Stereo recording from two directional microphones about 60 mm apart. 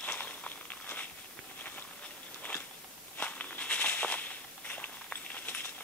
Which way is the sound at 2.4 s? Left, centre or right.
Left.